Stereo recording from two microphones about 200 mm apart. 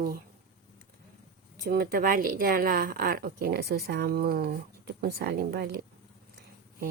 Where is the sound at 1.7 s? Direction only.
50° right (ahead or behind).